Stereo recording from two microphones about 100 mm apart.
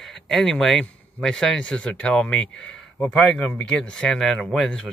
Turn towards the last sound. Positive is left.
turn(degrees=5)  # may be behind; listen again after turning